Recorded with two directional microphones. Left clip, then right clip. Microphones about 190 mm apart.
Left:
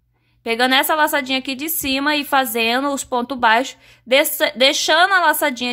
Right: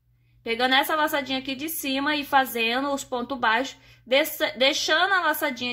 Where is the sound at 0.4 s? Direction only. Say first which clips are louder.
Left 6 dB; 35° left (ahead or behind).